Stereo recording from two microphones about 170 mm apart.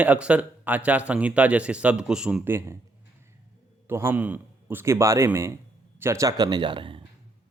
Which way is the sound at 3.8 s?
15° right (ahead or behind).